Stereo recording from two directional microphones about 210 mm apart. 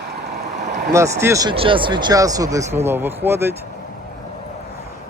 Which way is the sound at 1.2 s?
15° right (ahead or behind).